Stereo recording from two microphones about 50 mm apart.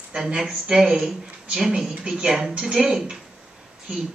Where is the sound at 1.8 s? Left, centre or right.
Centre.